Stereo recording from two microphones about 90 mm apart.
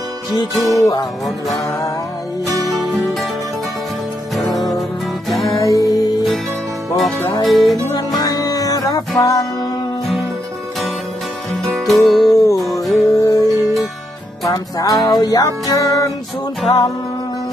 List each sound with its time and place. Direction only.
0.5 s music: centre (ahead or behind)
2.6 s music: centre (ahead or behind)
4.4 s music: centre (ahead or behind)
5.5 s music: 40° left (ahead or behind)
6.9 s music: centre (ahead or behind)
8.2 s music: 40° left (ahead or behind)
11.6 s music: centre (ahead or behind)
12.3 s music: 40° left (ahead or behind)
12.8 s music: centre (ahead or behind)
13.3 s music: 40° left (ahead or behind)